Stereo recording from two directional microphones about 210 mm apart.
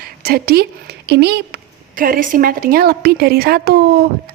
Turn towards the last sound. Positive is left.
turn(degrees=-45)  # may be behind; listen again after turning